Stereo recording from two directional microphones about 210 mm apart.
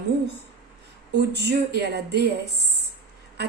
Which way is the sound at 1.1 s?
50° right (ahead or behind).